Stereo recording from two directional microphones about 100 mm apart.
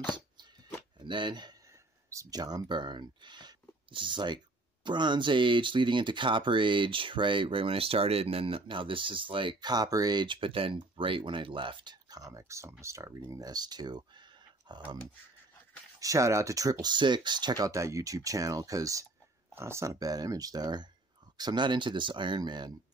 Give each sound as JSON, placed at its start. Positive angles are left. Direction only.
{"t": 1.0, "sound": "speech", "side_deg": -50}
{"t": 2.0, "sound": "speech", "side_deg": -35}
{"t": 13.3, "sound": "speech", "side_deg": -40}
{"t": 16.0, "sound": "speech", "side_deg": -35}
{"t": 16.8, "sound": "speech", "side_deg": -50}